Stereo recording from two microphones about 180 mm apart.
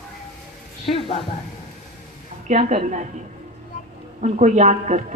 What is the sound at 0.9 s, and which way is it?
Speech, 30° left (ahead or behind).